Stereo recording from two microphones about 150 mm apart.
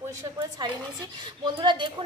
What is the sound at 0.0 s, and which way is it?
A woman's voice, 25° right (ahead or behind).